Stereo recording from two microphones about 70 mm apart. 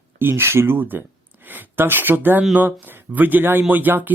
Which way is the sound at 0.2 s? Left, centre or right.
Right.